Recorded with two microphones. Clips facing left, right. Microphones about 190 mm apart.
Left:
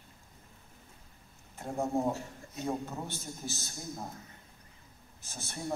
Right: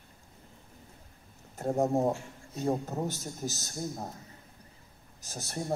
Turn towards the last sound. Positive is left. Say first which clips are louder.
# right 3 dB
turn(degrees=-40)  # may be behind; listen again after turning